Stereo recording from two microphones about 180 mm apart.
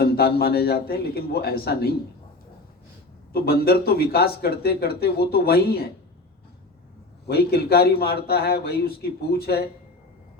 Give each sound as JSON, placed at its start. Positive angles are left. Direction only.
{"t": 0.0, "sound": "speech", "side_deg": 60}
{"t": 3.3, "sound": "speech", "side_deg": 60}
{"t": 7.3, "sound": "speech", "side_deg": 60}